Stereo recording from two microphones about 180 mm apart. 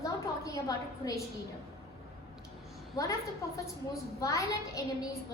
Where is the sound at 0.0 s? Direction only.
20° left (ahead or behind).